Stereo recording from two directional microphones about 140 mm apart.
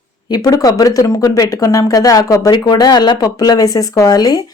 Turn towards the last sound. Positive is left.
turn(degrees=25)  # may be behind; listen again after turning